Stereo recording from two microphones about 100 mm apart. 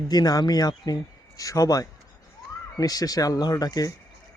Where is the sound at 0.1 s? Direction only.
40° left (ahead or behind).